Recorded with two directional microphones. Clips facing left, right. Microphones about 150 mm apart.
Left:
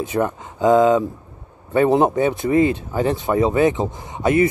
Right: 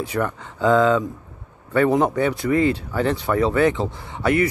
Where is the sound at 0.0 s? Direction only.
20° left (ahead or behind).